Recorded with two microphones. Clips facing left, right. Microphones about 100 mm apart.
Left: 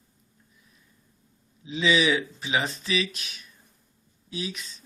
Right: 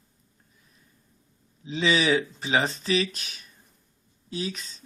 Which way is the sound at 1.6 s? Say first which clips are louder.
Even; 35° right (ahead or behind).